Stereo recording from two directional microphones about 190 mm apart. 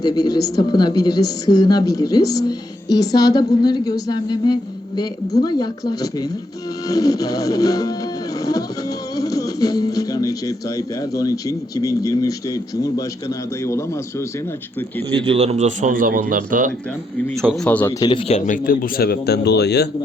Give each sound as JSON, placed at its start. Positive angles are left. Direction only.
{"t": 0.0, "sound": "a woman's voice", "side_deg": 20}
{"t": 9.1, "sound": "music", "side_deg": 20}
{"t": 11.2, "sound": "speech", "side_deg": 20}
{"t": 15.1, "sound": "a man's voice", "side_deg": -30}
{"t": 17.5, "sound": "speech", "side_deg": 5}
{"t": 18.0, "sound": "speech", "side_deg": 25}